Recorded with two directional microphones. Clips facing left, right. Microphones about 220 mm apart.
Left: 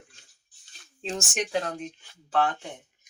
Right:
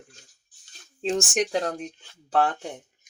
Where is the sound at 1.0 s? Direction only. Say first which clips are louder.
Right 6 dB; 35° right (ahead or behind).